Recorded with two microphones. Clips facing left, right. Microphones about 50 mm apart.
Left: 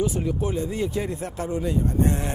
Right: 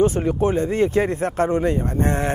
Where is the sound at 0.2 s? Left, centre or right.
Right.